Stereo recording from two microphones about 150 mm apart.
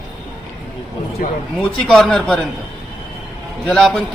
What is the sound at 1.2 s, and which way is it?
Speech, 75° left (ahead or behind).